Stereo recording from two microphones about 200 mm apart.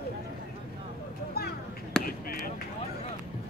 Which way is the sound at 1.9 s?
5° left (ahead or behind).